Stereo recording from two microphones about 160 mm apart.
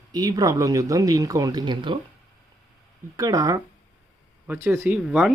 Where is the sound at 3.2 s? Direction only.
20° right (ahead or behind); by 5.3 s 5° right (ahead or behind).